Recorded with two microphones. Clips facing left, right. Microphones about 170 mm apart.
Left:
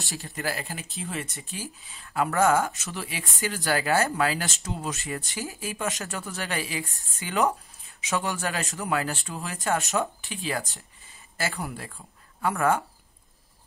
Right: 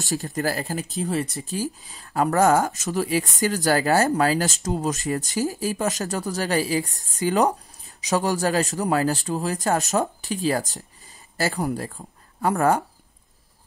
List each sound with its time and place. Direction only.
0.0 s speech: 40° right (ahead or behind)